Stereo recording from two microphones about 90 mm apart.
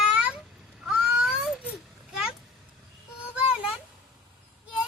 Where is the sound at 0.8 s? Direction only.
5° right (ahead or behind).